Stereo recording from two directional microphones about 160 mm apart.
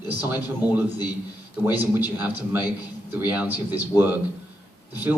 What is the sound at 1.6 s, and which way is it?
A man's voice, 10° right (ahead or behind).